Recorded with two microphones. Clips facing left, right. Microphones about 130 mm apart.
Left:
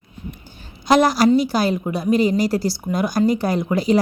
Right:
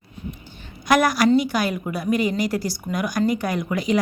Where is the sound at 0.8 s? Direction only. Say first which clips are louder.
Left 3 dB; 25° left (ahead or behind).